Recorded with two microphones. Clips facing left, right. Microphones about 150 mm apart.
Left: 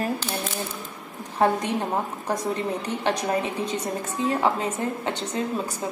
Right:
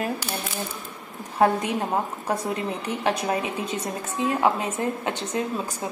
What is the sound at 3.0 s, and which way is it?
Speech, 5° right (ahead or behind).